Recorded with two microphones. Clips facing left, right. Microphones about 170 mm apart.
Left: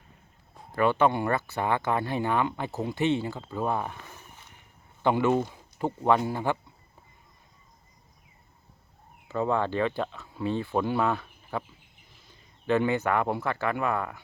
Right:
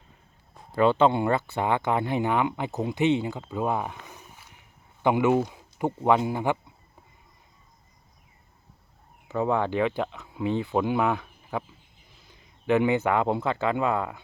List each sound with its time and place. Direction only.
0.8 s speech: 25° right (ahead or behind)
9.3 s speech: 15° right (ahead or behind)